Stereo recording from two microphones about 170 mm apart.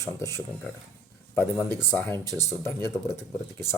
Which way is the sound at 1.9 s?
15° left (ahead or behind).